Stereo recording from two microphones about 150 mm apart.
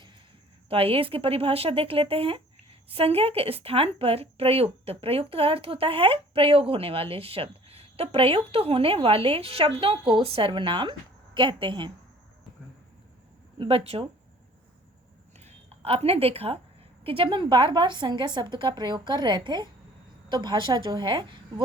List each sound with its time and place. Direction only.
0.7 s a woman's voice: 40° right (ahead or behind)
13.6 s a woman's voice: 40° right (ahead or behind)
15.4 s a woman's voice: 40° right (ahead or behind)